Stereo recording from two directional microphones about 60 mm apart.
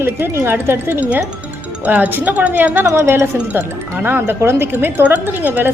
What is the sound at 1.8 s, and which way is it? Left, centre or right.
A woman's voice, right.